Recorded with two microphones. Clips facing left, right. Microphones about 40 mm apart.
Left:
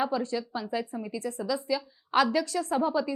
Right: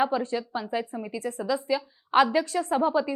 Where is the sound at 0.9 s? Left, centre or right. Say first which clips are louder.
Right 1 dB; centre.